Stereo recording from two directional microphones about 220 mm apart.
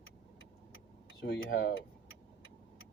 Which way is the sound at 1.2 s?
55° left (ahead or behind).